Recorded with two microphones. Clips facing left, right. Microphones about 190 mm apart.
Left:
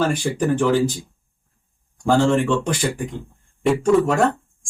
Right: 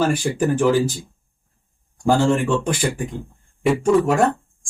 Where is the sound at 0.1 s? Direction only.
5° right (ahead or behind).